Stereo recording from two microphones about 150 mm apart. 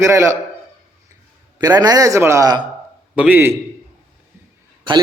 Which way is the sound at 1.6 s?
25° right (ahead or behind).